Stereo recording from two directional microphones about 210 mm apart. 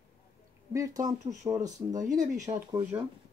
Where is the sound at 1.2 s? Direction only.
35° right (ahead or behind).